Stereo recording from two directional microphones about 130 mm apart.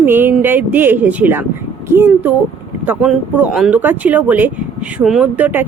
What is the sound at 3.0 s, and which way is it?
Speech, 5° right (ahead or behind).